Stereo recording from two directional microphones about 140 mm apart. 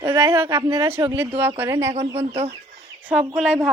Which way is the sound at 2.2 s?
50° right (ahead or behind).